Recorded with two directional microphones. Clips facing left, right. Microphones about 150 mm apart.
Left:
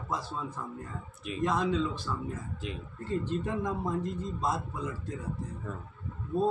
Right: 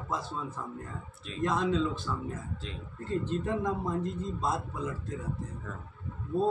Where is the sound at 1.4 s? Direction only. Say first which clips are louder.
Right 1 dB; centre (ahead or behind).